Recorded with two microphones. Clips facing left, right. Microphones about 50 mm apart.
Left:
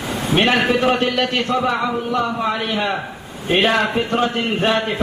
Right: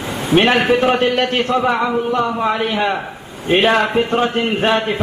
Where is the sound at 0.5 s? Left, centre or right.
Right.